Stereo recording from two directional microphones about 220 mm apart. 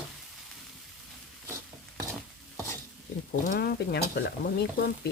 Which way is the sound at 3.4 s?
45° left (ahead or behind).